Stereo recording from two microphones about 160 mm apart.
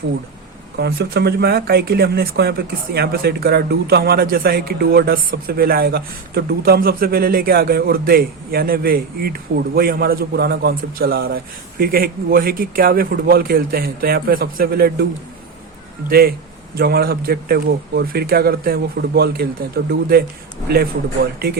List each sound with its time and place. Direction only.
0.8 s speech: 80° right
16.0 s speech: 70° right (ahead or behind)
21.3 s speech: 75° right (ahead or behind)